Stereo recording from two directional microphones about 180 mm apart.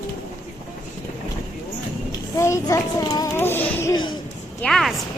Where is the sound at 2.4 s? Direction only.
15° left (ahead or behind).